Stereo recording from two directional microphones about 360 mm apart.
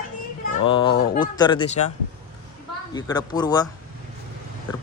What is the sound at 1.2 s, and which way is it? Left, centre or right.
Speech, centre.